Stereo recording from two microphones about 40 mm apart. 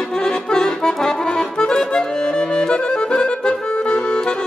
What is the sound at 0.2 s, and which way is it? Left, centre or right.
Accordion, centre.